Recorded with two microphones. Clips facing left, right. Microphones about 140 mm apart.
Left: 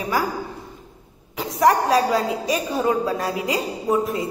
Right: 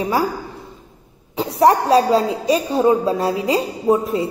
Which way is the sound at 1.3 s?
30° right (ahead or behind).